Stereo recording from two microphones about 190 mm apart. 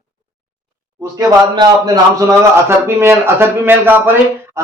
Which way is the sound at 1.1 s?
20° right (ahead or behind).